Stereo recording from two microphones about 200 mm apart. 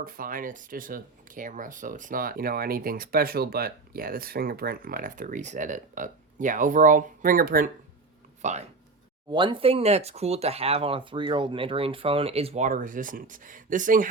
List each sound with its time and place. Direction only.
0.0 s speech: 45° right (ahead or behind)
9.3 s speech: 25° right (ahead or behind); by 14.1 s 40° right (ahead or behind)